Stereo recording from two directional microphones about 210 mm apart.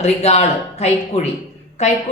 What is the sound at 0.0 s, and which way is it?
A woman's voice, 30° left (ahead or behind).